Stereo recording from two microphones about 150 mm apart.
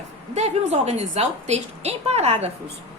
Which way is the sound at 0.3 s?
45° right (ahead or behind).